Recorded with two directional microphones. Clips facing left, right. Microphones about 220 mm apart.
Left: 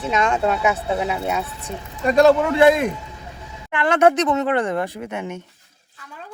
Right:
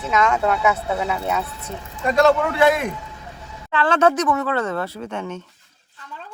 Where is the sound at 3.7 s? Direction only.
15° left (ahead or behind).